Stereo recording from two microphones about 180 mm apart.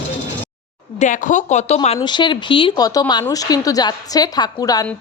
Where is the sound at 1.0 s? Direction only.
45° left (ahead or behind).